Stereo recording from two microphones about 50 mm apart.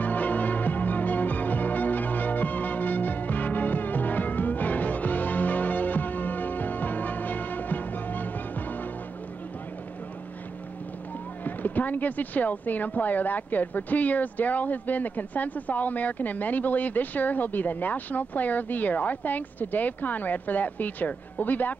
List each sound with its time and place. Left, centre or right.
0.0 s music: left
11.4 s speech: left